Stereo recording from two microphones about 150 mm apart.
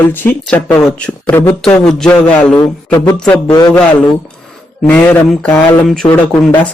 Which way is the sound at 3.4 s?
25° left (ahead or behind).